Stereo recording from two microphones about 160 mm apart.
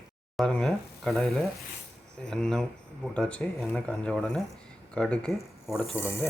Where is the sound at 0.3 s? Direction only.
5° left (ahead or behind).